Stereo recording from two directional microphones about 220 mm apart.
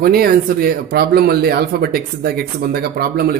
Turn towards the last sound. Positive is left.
turn(degrees=-45)  # may be behind; listen again after turning